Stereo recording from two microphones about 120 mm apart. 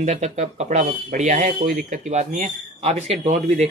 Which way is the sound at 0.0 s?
75° right (ahead or behind).